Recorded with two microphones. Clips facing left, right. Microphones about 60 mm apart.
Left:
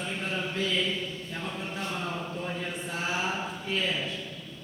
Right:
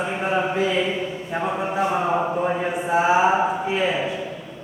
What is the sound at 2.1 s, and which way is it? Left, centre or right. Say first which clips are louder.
Mantra: right 13 dB; right.